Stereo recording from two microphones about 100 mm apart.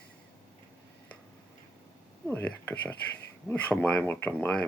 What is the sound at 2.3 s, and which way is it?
Speech, 20° left (ahead or behind).